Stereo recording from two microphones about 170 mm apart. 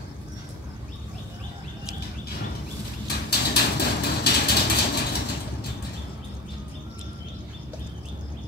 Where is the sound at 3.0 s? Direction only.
70° left (ahead or behind).